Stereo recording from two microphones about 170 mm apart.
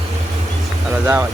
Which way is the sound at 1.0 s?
15° right (ahead or behind).